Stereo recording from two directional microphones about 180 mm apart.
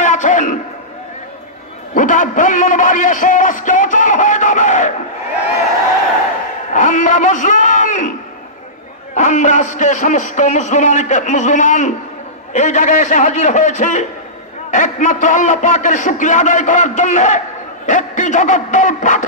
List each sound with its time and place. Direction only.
0.0 s a sound: 45° left (ahead or behind)
2.0 s a man's voice: 45° left (ahead or behind)
6.7 s a man's voice: 45° left (ahead or behind)
9.1 s a man's voice: 45° left (ahead or behind)